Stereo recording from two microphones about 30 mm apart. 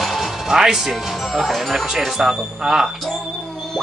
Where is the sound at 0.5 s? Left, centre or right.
Centre.